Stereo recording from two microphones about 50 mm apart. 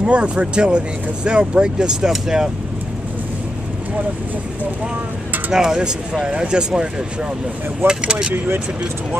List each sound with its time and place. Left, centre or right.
0.0 s speech: right
5.5 s speech: centre